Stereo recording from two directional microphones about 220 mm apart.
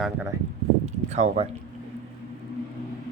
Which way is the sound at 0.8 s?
30° right (ahead or behind).